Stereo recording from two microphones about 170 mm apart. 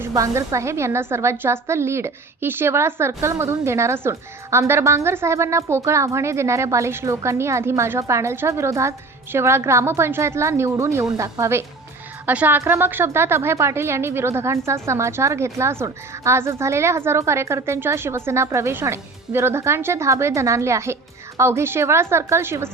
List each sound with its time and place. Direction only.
0.0 s a woman's voice: 20° right (ahead or behind)